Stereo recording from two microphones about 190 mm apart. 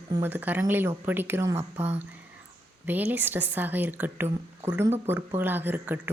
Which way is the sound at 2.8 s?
10° right (ahead or behind).